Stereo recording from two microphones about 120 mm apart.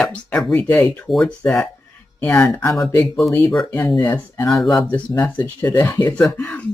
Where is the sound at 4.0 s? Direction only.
35° left (ahead or behind).